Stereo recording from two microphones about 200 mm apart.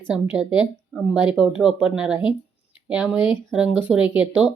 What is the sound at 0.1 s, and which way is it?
A woman's voice, 5° right (ahead or behind).